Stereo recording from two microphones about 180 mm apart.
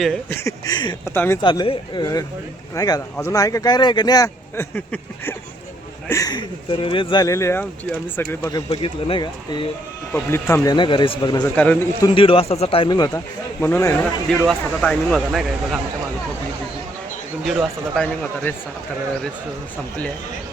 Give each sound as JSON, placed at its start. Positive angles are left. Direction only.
{"t": 0.3, "sound": "speech", "side_deg": 15}
{"t": 1.1, "sound": "speech", "side_deg": 10}
{"t": 1.4, "sound": "speech", "side_deg": 25}
{"t": 4.7, "sound": "speech", "side_deg": 10}
{"t": 6.1, "sound": "speech", "side_deg": 20}
{"t": 10.1, "sound": "speech", "side_deg": 15}
{"t": 11.4, "sound": "speech", "side_deg": 10}
{"t": 12.0, "sound": "a man's voice", "side_deg": 30}
{"t": 13.6, "sound": "speech", "side_deg": 10}
{"t": 17.4, "sound": "speech", "side_deg": 0}